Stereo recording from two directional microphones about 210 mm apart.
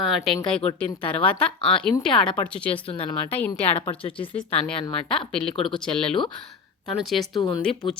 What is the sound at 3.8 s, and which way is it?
Speech, 25° left (ahead or behind).